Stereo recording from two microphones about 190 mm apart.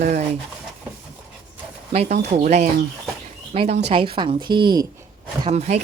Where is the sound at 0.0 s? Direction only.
40° right (ahead or behind).